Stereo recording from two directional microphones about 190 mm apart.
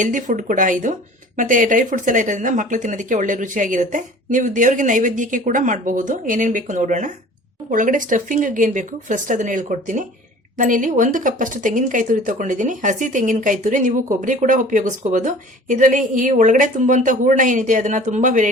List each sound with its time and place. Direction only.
0.0 s speech: 45° right (ahead or behind)